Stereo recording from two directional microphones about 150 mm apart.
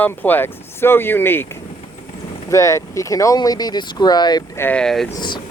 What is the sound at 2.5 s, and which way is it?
Speech, 20° left (ahead or behind).